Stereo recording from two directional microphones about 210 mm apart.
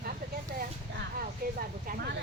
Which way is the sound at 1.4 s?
45° right (ahead or behind).